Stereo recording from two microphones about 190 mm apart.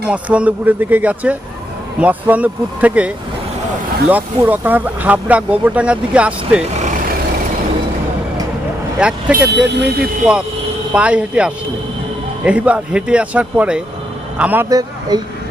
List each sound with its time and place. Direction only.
0.1 s speech: 5° right (ahead or behind)
4.1 s speech: 10° right (ahead or behind)
9.3 s speech: 65° right (ahead or behind)
10.0 s speech: 5° right (ahead or behind)